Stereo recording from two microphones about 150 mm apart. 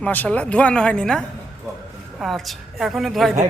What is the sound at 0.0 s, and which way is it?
Speech, 10° left (ahead or behind).